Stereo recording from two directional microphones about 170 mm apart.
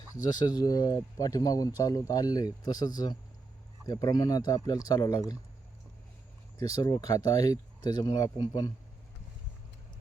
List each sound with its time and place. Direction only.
0.1 s speech: 25° left (ahead or behind)
6.6 s speech: 20° left (ahead or behind)